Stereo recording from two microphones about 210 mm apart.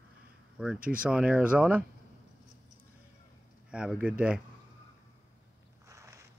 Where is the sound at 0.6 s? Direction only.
5° right (ahead or behind).